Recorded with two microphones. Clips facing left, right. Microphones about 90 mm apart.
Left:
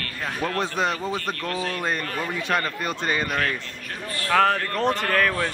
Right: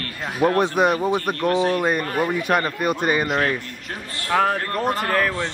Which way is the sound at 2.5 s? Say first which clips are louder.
Right 5 dB; 15° right (ahead or behind).